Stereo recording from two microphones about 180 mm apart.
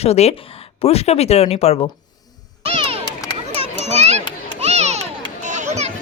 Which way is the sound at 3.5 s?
35° right (ahead or behind).